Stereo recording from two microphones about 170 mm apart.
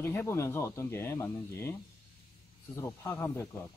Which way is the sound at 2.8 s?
15° left (ahead or behind).